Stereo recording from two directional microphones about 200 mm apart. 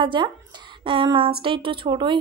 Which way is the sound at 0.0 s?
25° right (ahead or behind).